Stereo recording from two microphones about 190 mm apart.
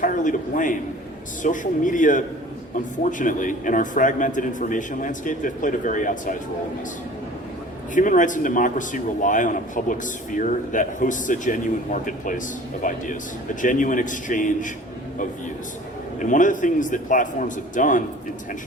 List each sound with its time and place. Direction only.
0.0 s a man's voice: 45° left (ahead or behind)
7.9 s a man's voice: 45° left (ahead or behind)
16.2 s a man's voice: 45° left (ahead or behind)